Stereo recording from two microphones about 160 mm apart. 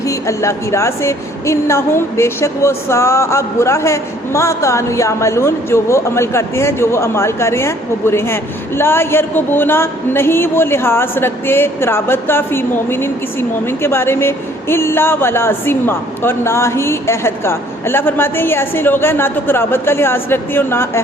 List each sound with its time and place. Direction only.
0.0 s a woman's voice: 20° left (ahead or behind)